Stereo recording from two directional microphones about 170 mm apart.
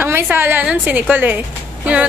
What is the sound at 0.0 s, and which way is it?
Speech, 10° right (ahead or behind).